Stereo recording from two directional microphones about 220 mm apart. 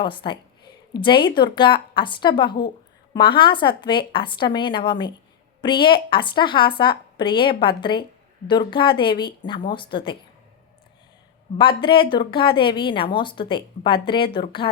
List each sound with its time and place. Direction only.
0.0 s a woman's voice: 20° left (ahead or behind)
11.8 s a woman's voice: 20° left (ahead or behind)